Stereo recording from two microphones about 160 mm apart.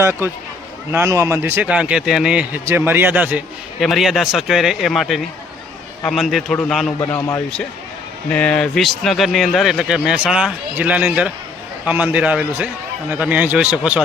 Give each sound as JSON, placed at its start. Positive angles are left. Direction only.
{"t": 0.0, "sound": "a man's voice", "side_deg": -15}
{"t": 7.0, "sound": "speech", "side_deg": 15}
{"t": 8.3, "sound": "a man's voice", "side_deg": 5}